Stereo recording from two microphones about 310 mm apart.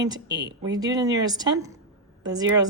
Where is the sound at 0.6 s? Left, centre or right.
Centre.